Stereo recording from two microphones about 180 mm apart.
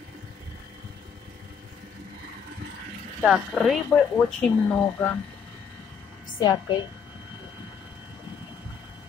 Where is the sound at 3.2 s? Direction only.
Centre (ahead or behind).